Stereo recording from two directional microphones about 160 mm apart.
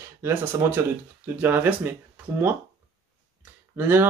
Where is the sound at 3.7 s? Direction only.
15° right (ahead or behind).